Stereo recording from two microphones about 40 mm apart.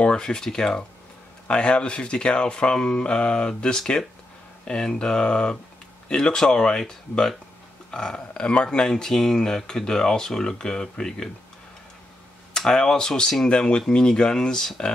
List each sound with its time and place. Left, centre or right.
0.0 s speech: left
12.5 s speech: centre